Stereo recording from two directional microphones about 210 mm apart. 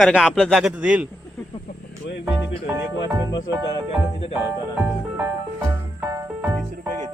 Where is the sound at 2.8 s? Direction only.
15° right (ahead or behind).